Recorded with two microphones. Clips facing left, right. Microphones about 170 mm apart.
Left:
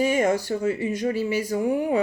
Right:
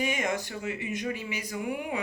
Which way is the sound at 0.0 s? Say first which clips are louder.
Left 9 dB; 40° left (ahead or behind).